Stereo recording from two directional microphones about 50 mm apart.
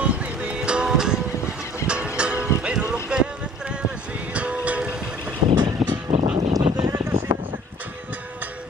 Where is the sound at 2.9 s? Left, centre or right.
Centre.